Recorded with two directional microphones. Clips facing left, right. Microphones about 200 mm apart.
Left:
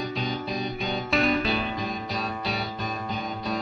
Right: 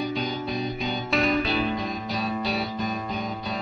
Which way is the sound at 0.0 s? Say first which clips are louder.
Right 2 dB; centre (ahead or behind).